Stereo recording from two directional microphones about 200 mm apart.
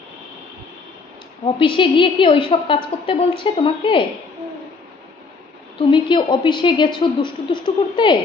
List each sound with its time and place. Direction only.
1.4 s a woman's voice: 25° left (ahead or behind)
5.8 s a woman's voice: 25° left (ahead or behind)